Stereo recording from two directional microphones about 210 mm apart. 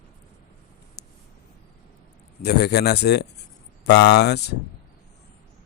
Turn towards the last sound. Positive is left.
turn(degrees=50)  # may be behind; listen again after turning